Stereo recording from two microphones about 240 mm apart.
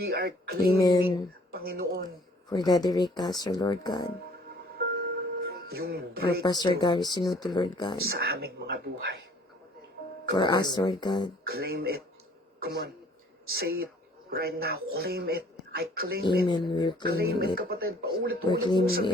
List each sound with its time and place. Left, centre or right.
0.0 s speech: right
0.8 s speech: centre
1.5 s speech: right
2.5 s speech: centre
4.8 s music: right
6.4 s speech: centre
8.1 s speech: right
10.3 s speech: centre
11.4 s speech: right
16.5 s speech: centre
17.2 s speech: right
18.6 s speech: centre